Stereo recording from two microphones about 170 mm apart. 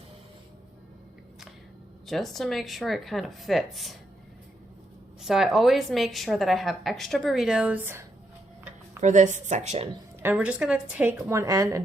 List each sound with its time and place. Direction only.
2.0 s a woman's voice: centre (ahead or behind)
5.2 s a woman's voice: centre (ahead or behind)
9.0 s a woman's voice: 45° right (ahead or behind)
10.2 s a woman's voice: 10° right (ahead or behind)